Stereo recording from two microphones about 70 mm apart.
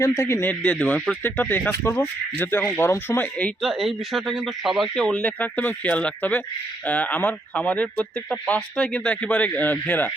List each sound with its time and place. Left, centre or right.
0.0 s speech: left
0.6 s a man's voice: left
3.6 s speech: centre
5.0 s a man's voice: centre